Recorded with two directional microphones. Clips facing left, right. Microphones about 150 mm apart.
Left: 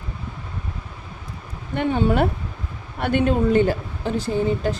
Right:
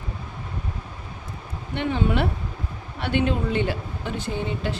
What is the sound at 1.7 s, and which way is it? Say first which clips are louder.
Speech: left 4 dB; 45° left (ahead or behind).